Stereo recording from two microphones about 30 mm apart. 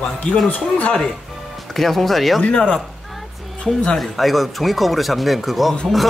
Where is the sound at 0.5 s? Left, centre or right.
Left.